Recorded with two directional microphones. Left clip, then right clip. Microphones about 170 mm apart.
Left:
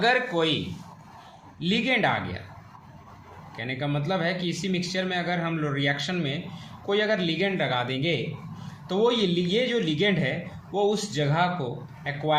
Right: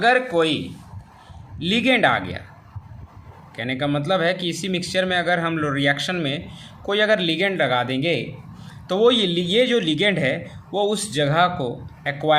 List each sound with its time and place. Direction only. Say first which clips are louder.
0.0 s a man's voice: right 5 dB; 35° right (ahead or behind)
3.5 s speech: right 7 dB; 40° right (ahead or behind)